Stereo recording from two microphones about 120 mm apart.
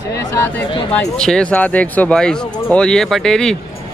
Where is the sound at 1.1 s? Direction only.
5° left (ahead or behind).